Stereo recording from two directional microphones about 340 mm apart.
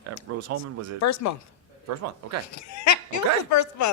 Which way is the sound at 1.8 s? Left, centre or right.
Right.